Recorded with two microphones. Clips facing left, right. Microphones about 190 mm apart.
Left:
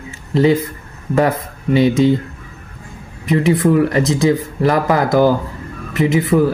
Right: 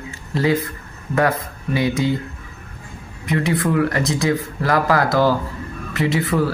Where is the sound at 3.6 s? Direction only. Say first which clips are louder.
Left 5 dB; 20° left (ahead or behind).